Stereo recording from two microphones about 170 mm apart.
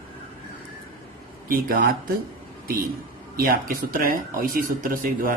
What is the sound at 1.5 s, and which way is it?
Speech, 60° right (ahead or behind).